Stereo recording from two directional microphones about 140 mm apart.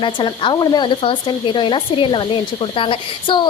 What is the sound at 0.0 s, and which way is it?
A woman's voice, 35° left (ahead or behind).